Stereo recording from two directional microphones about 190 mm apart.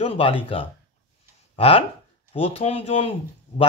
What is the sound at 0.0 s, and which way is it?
Speech, 30° left (ahead or behind).